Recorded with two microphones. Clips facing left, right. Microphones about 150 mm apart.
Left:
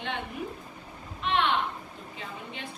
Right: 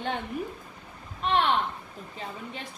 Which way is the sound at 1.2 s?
40° right (ahead or behind).